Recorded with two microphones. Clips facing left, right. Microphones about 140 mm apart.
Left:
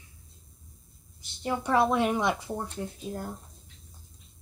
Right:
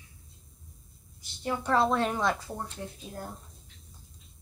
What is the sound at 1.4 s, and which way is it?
A woman's voice, 15° left (ahead or behind).